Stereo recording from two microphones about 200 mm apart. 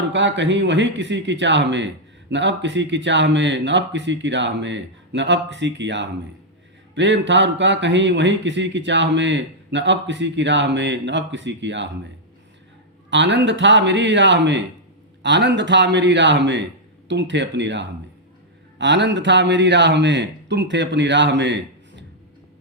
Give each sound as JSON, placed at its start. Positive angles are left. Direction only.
{"t": 0.1, "sound": "speech", "side_deg": -65}
{"t": 13.1, "sound": "speech", "side_deg": -65}